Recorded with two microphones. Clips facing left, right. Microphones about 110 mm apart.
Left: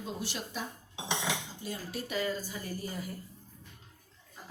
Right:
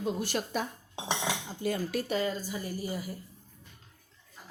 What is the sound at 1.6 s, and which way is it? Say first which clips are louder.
Speech: right 11 dB; 60° right (ahead or behind).